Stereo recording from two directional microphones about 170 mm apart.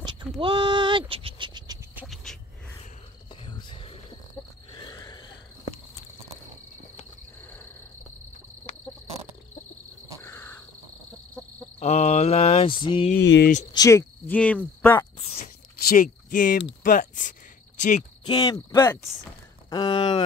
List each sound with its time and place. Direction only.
0.4 s a sound: 30° right (ahead or behind)
3.4 s a sound: 30° left (ahead or behind)
10.2 s crow: 15° left (ahead or behind)
11.8 s mantra: 40° left (ahead or behind)
13.1 s speech: 80° left
13.7 s speech: 15° left (ahead or behind)
15.9 s speech: 55° left (ahead or behind)
18.2 s speech: 25° left (ahead or behind)
20.0 s a sound: 35° left (ahead or behind)